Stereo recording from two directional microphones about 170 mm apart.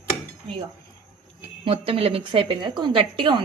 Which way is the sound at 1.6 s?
35° right (ahead or behind).